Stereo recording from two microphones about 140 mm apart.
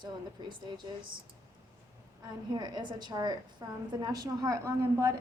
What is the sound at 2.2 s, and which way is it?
A woman's voice, 30° right (ahead or behind).